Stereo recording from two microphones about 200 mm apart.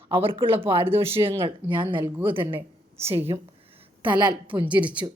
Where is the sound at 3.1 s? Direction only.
30° right (ahead or behind).